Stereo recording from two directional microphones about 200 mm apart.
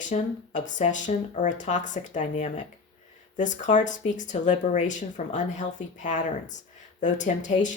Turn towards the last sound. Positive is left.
turn(degrees=40)  # may be behind; listen again after turning